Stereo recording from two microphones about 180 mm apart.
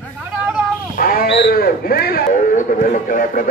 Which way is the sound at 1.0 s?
55° left (ahead or behind).